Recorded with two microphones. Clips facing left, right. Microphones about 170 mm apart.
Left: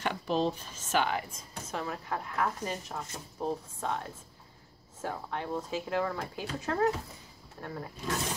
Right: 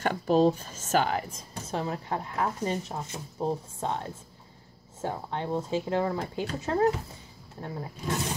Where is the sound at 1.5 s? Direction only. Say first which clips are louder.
Right 4 dB; 30° right (ahead or behind).